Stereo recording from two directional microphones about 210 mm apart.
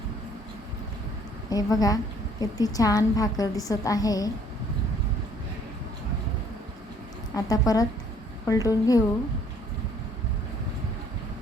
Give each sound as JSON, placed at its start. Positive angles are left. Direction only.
{"t": 1.5, "sound": "a woman's voice", "side_deg": 15}
{"t": 7.3, "sound": "a woman's voice", "side_deg": 20}